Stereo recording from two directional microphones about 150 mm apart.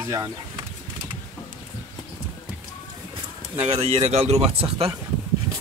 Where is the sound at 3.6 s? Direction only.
40° right (ahead or behind).